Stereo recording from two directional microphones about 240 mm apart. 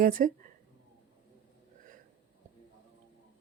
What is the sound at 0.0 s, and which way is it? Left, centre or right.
Speech, right.